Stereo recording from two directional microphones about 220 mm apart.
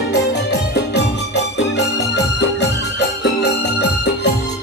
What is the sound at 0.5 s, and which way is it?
Music, 50° left (ahead or behind).